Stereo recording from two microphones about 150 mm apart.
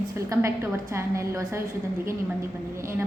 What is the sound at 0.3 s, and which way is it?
A woman's voice, 20° right (ahead or behind).